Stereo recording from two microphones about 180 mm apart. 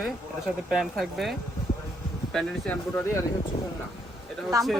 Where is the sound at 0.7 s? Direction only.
Centre (ahead or behind).